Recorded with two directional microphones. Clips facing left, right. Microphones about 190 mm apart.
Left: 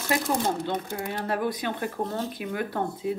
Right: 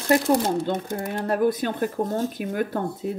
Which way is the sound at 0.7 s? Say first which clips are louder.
Right 3 dB; 45° right (ahead or behind).